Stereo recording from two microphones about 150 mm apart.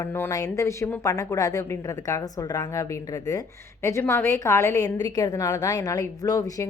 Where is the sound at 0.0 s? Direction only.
15° left (ahead or behind).